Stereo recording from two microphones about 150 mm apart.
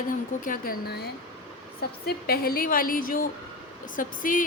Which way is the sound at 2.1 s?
90° left.